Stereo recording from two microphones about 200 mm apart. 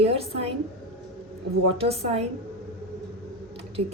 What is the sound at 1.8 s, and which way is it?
Speech, 30° right (ahead or behind).